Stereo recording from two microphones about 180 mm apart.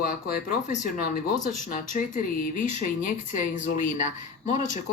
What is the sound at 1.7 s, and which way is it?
Speech, 45° left (ahead or behind).